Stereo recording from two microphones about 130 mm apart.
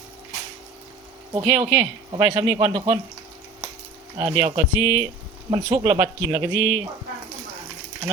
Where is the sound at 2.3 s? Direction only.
35° right (ahead or behind).